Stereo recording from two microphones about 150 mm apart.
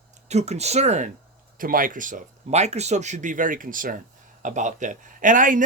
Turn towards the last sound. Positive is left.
turn(degrees=-60)  # may be behind; listen again after turning